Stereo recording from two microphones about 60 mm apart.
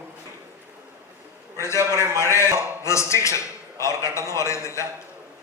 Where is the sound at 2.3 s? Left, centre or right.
Left.